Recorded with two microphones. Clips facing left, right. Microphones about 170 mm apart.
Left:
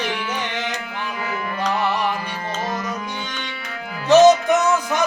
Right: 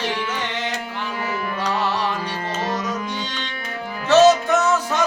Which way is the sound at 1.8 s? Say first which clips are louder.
Left 1 dB; 15° left (ahead or behind).